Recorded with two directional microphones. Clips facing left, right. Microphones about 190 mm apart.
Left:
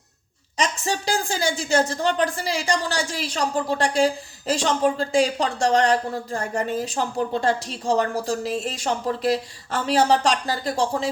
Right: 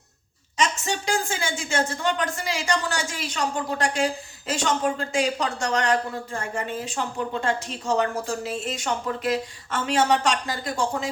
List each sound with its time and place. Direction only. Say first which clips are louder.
0.5 s a woman's voice: left 1 dB; 35° left (ahead or behind)